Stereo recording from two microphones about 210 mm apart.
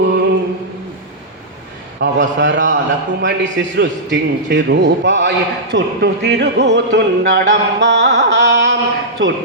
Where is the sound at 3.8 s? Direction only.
55° right (ahead or behind).